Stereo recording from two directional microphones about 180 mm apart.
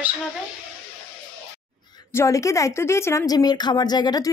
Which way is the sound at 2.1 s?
15° left (ahead or behind).